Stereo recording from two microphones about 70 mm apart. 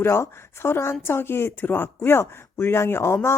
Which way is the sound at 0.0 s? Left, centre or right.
Left.